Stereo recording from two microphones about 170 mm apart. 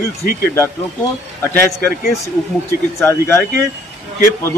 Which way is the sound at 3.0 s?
15° left (ahead or behind).